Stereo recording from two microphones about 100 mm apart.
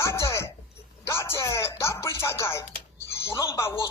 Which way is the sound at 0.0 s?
30° left (ahead or behind).